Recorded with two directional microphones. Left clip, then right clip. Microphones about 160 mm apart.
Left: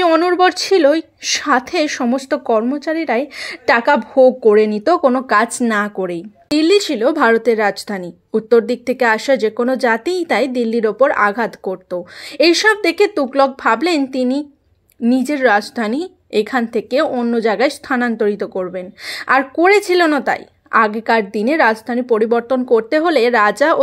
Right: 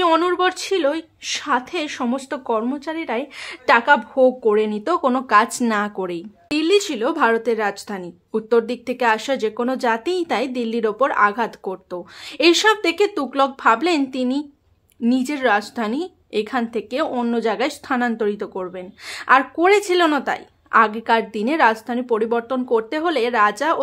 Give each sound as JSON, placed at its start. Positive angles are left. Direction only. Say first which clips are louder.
{"t": 0.3, "sound": "a woman's voice", "louder": "left 7 dB", "side_deg": 25}
{"t": 6.6, "sound": "a woman's voice", "louder": "left 5 dB", "side_deg": 25}
{"t": 17.1, "sound": "a woman's voice", "louder": "left 4 dB", "side_deg": 10}
{"t": 17.4, "sound": "a woman's voice", "louder": "left 8 dB", "side_deg": 20}